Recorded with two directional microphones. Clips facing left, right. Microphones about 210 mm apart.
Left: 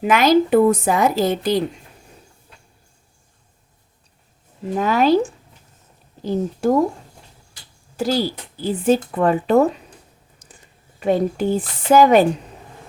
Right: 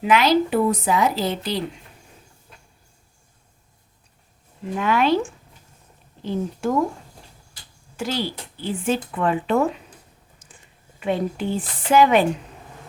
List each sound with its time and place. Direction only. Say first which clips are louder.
0.0 s a woman's voice: left 3 dB; 45° left (ahead or behind)
4.7 s speech: left 4 dB; 40° left (ahead or behind)
7.9 s speech: left 6 dB; 40° left (ahead or behind)
10.4 s a sound: left 3 dB; 40° left (ahead or behind)
11.0 s speech: left 5 dB; 40° left (ahead or behind)